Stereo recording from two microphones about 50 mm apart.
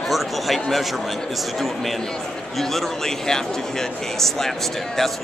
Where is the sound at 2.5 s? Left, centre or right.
Centre.